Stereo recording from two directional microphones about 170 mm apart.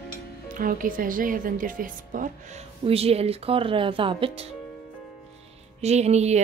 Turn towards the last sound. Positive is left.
turn(degrees=-40)  # may be behind; listen again after turning